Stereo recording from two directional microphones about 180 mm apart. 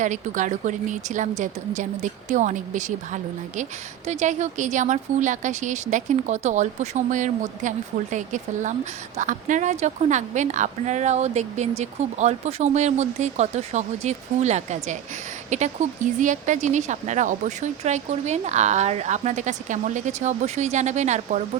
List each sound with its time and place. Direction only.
0.0 s speech: 45° right (ahead or behind)